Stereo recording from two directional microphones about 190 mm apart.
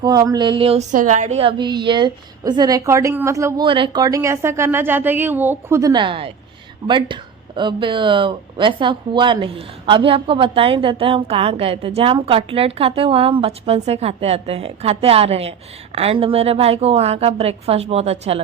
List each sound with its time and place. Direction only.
0.0 s speech: 20° right (ahead or behind)
3.7 s a woman's voice: 25° right (ahead or behind)